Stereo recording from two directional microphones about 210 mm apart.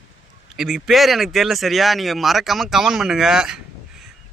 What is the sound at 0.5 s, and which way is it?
Speech, centre (ahead or behind).